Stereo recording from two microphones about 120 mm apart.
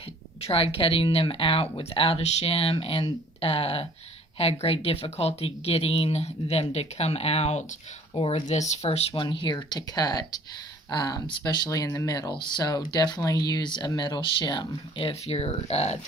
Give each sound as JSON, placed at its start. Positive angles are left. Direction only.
{"t": 0.4, "sound": "speech", "side_deg": 50}
{"t": 8.1, "sound": "speech", "side_deg": 50}
{"t": 9.1, "sound": "speech", "side_deg": 40}
{"t": 15.0, "sound": "speech", "side_deg": 55}